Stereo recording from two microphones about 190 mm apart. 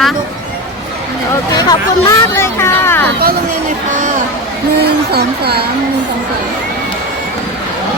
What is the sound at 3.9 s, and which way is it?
Speech, 45° right (ahead or behind).